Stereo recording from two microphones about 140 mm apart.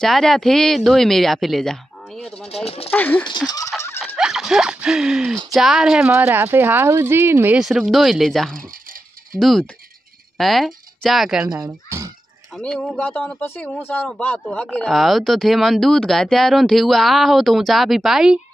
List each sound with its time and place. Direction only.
0.0 s speech: centre (ahead or behind)
2.4 s speech: 50° left (ahead or behind)
2.9 s speech: 10° left (ahead or behind)
3.3 s fowl: 30° left (ahead or behind)
4.2 s speech: 5° right (ahead or behind)
6.1 s speech: 15° right (ahead or behind)
7.6 s speech: centre (ahead or behind)
11.4 s speech: 20° right (ahead or behind)
12.5 s speech: 5° left (ahead or behind)